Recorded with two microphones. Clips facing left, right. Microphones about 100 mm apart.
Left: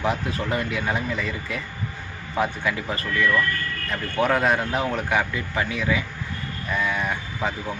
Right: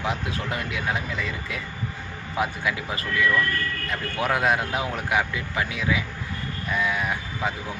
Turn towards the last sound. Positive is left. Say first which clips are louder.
# left 1 dB
turn(degrees=0)  # may be behind; listen again after turning